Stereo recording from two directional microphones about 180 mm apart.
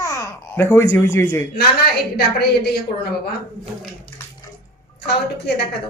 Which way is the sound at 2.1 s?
60° left (ahead or behind).